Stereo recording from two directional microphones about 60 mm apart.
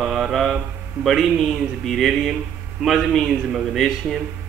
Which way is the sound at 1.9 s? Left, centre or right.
Centre.